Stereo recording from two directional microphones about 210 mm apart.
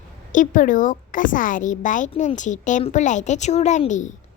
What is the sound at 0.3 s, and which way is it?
A woman's voice, 40° left (ahead or behind).